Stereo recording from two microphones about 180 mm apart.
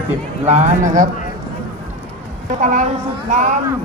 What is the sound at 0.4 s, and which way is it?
Speech, 40° right (ahead or behind).